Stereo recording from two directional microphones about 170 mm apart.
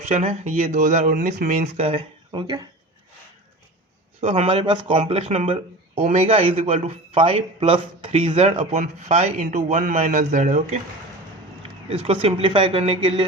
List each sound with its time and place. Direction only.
0.1 s speech: 40° right (ahead or behind)
4.2 s a man's voice: 40° right (ahead or behind)
11.9 s speech: 35° right (ahead or behind)